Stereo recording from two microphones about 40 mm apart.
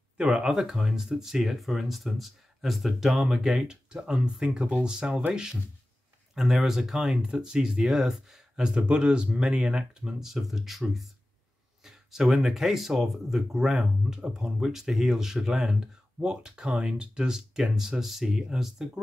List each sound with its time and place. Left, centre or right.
0.2 s speech: centre
3.9 s speech: right
6.3 s speech: centre; by 10.1 s right
10.2 s speech: centre